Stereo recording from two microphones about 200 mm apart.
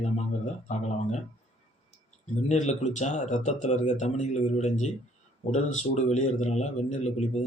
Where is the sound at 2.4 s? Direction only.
35° left (ahead or behind).